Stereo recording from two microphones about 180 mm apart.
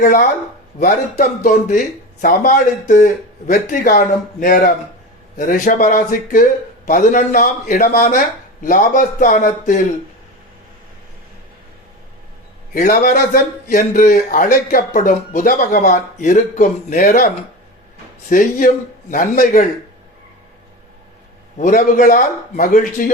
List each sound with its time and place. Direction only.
0.0 s a man's voice: 45° left (ahead or behind)
12.7 s a man's voice: 50° left (ahead or behind)
21.6 s a man's voice: 45° left (ahead or behind)